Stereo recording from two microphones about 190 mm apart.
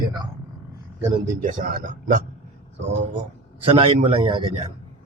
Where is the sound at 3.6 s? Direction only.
30° right (ahead or behind).